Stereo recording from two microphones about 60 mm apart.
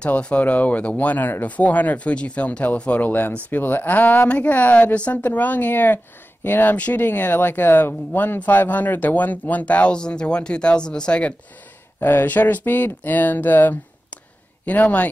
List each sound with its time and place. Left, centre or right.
0.0 s speech: left
12.0 s speech: left